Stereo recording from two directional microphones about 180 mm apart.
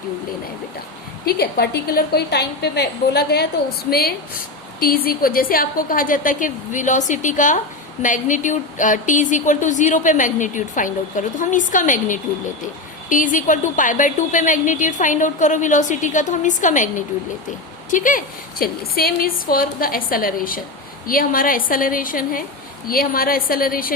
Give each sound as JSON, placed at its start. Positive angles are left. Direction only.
{"t": 1.2, "sound": "a woman's voice", "side_deg": 60}
{"t": 17.9, "sound": "speech", "side_deg": 45}